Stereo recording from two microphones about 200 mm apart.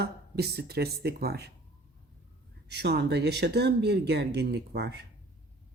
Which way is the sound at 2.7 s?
55° right (ahead or behind).